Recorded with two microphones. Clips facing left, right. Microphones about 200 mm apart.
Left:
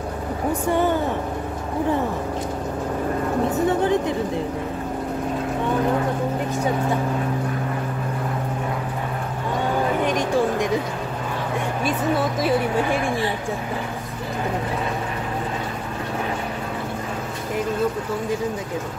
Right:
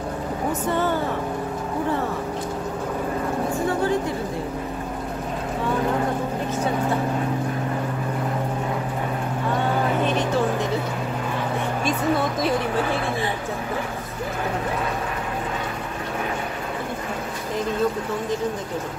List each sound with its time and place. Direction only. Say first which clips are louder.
0.5 s speech: left 3 dB; 15° left (ahead or behind)
3.4 s a sound: left 3 dB; 20° left (ahead or behind)
10.0 s vehicle: left 1 dB; 15° left (ahead or behind)
12.4 s speech: left 2 dB; 5° left (ahead or behind)